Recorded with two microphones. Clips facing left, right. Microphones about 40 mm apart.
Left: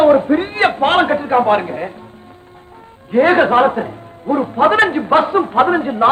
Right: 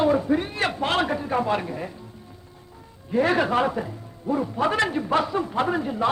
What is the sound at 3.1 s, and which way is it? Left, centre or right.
A man's voice, left.